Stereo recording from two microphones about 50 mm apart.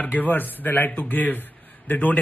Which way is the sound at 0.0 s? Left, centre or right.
Left.